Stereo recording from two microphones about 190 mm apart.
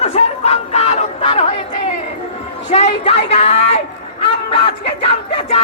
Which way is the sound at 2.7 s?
35° left (ahead or behind).